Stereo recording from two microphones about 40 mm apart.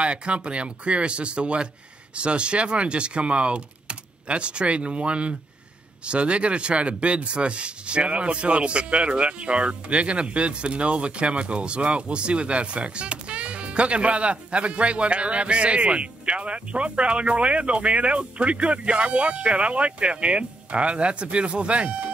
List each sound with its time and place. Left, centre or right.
0.0 s speech: right